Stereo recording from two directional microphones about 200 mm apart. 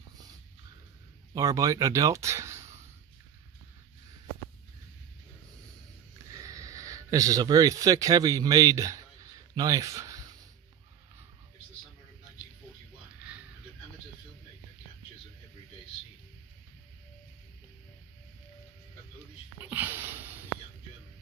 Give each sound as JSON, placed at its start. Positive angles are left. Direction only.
{"t": 1.3, "sound": "speech", "side_deg": -15}
{"t": 6.3, "sound": "speech", "side_deg": -15}
{"t": 19.7, "sound": "a sound", "side_deg": -10}